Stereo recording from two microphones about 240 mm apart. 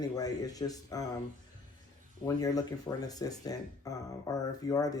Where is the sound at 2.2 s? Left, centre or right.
Centre.